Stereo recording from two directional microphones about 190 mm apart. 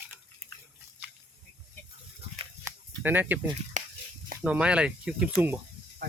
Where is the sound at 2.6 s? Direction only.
10° right (ahead or behind).